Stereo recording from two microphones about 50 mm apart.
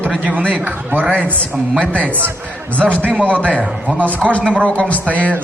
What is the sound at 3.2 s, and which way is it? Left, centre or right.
Speech, left.